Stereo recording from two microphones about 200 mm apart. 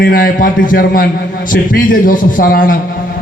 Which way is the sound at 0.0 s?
45° left (ahead or behind).